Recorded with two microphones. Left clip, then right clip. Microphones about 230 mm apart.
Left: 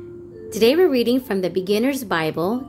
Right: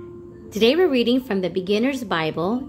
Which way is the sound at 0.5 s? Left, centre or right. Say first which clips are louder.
Left 2 dB; centre.